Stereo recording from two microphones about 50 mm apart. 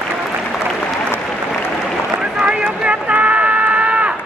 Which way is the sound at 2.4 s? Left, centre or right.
Centre.